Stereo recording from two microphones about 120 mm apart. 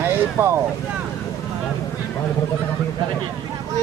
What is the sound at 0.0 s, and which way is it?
Vehicle, 20° right (ahead or behind).